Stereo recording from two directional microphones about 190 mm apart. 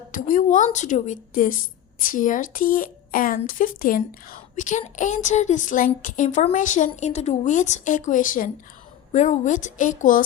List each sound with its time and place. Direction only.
0.1 s a woman's voice: 45° left (ahead or behind)